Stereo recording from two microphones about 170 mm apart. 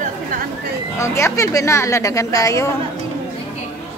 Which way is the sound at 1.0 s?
15° left (ahead or behind).